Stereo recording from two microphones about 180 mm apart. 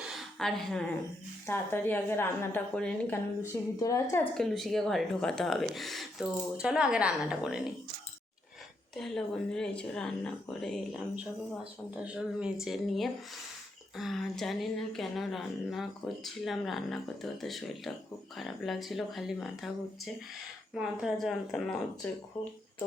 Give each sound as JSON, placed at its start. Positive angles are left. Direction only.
{"t": 0.1, "sound": "a sound", "side_deg": 0}
{"t": 1.5, "sound": "a woman's voice", "side_deg": 10}
{"t": 3.5, "sound": "a woman's voice", "side_deg": 20}
{"t": 4.4, "sound": "speech", "side_deg": 0}
{"t": 9.0, "sound": "speech", "side_deg": 0}
{"t": 12.0, "sound": "speech", "side_deg": -5}
{"t": 20.7, "sound": "speech", "side_deg": -5}